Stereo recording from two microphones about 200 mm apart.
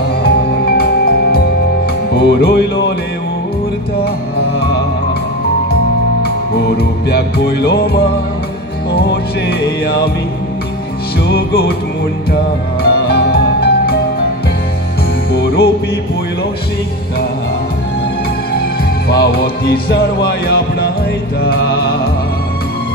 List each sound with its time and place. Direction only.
0.2 s music: 50° left (ahead or behind)
6.2 s music: 55° left (ahead or behind)
9.5 s music: 50° left (ahead or behind)
11.3 s music: 50° left (ahead or behind)
12.8 s music: 55° left (ahead or behind)
15.3 s music: 55° left (ahead or behind)
19.0 s music: 50° left (ahead or behind)